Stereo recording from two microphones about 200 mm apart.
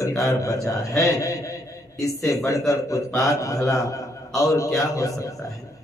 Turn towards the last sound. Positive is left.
turn(degrees=15)  # may be behind; listen again after turning